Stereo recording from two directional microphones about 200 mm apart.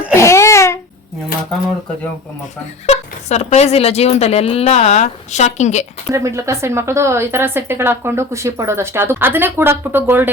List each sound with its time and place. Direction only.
0.2 s a sound: 15° left (ahead or behind)
2.8 s speech: 35° left (ahead or behind)
6.1 s a woman's voice: 15° right (ahead or behind)